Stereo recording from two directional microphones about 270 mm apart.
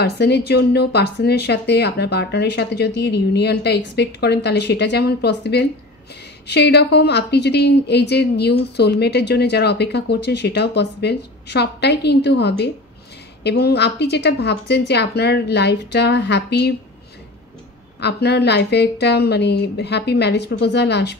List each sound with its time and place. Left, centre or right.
0.0 s a woman's voice: left
18.0 s a woman's voice: left